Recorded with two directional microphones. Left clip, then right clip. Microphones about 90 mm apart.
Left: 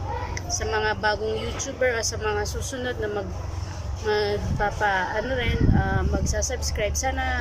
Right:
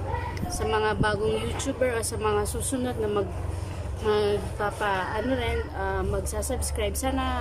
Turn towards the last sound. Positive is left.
turn(degrees=-30)  # may be behind; listen again after turning